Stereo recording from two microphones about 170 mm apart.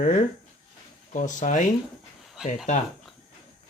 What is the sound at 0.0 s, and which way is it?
Speech, 45° left (ahead or behind).